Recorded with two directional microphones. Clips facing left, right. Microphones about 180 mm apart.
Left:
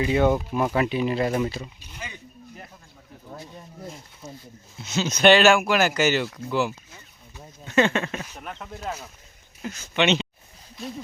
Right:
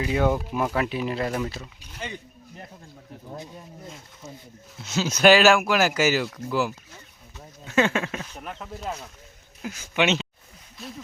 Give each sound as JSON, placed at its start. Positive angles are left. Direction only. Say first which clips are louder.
{"t": 0.0, "sound": "speech", "louder": "left 3 dB", "side_deg": 0}
{"t": 3.3, "sound": "speech", "louder": "right 2 dB", "side_deg": -20}
{"t": 4.8, "sound": "speech", "louder": "even", "side_deg": -5}
{"t": 8.1, "sound": "speech", "louder": "left 1 dB", "side_deg": 10}
{"t": 8.4, "sound": "speech", "louder": "even", "side_deg": -5}
{"t": 9.6, "sound": "speech", "louder": "even", "side_deg": -10}